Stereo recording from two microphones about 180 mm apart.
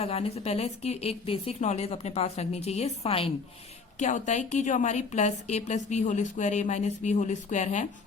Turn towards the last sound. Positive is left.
turn(degrees=40)  # may be behind; listen again after turning